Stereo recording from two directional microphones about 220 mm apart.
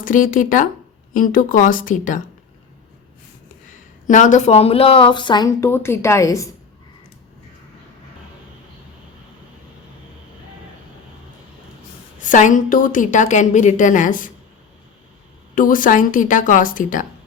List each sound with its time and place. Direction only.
0.0 s a woman's voice: 35° left (ahead or behind)
4.0 s speech: 35° left (ahead or behind); by 6.5 s 15° left (ahead or behind)
12.2 s a woman's voice: 35° left (ahead or behind)
15.5 s a woman's voice: 40° left (ahead or behind)